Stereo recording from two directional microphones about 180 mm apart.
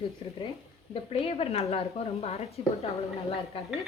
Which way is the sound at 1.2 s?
35° left (ahead or behind).